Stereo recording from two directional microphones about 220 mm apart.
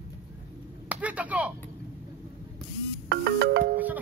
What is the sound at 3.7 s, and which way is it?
Music, 5° right (ahead or behind).